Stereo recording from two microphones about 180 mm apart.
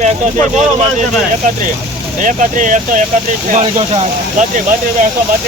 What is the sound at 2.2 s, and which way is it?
Speech, 45° right (ahead or behind).